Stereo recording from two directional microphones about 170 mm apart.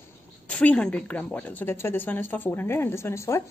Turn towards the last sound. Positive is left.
turn(degrees=15)  # may be behind; listen again after turning